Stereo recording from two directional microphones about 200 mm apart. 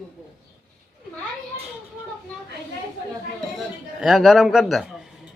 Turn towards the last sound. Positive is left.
turn(degrees=0)  # may be behind; listen again after turning